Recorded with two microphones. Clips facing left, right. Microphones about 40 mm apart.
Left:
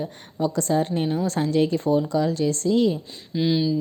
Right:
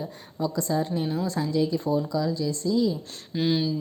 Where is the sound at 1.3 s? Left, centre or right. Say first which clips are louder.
Left 4 dB; left.